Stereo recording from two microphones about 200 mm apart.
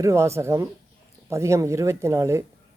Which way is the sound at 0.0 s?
15° right (ahead or behind).